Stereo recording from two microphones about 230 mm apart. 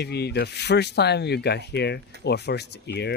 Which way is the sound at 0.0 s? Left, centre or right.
Left.